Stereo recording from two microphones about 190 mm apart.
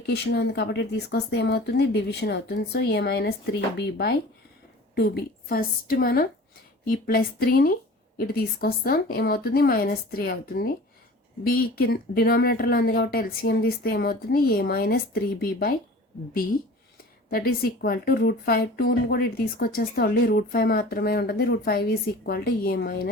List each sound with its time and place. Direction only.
0.1 s speech: 60° left (ahead or behind)
17.2 s speech: 50° left (ahead or behind)